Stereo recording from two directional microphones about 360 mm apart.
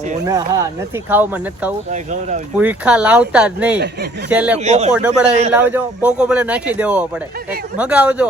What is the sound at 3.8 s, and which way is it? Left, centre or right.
Speech, right.